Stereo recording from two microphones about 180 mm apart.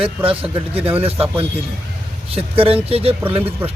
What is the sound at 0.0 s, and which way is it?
A man's voice, 30° right (ahead or behind).